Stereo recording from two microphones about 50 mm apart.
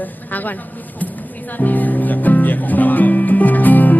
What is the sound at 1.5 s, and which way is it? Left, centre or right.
Music, left.